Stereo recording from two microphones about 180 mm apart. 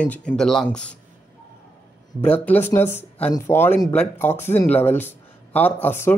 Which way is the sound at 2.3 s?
10° left (ahead or behind).